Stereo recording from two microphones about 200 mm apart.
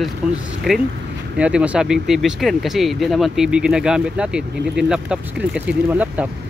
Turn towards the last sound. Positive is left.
turn(degrees=-5)  # may be behind; listen again after turning